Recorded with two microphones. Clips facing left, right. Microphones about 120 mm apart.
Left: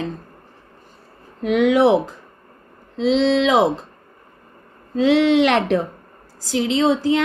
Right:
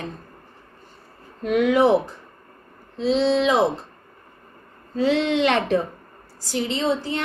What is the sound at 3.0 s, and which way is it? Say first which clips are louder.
Speech: left 3 dB; 90° left.